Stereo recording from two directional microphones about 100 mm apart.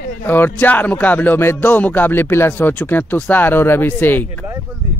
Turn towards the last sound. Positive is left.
turn(degrees=20)  # may be behind; listen again after turning